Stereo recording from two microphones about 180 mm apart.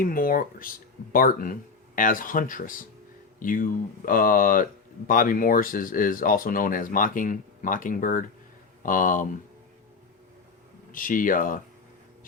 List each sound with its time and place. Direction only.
0.0 s speech: 50° left (ahead or behind)
10.9 s speech: 50° left (ahead or behind)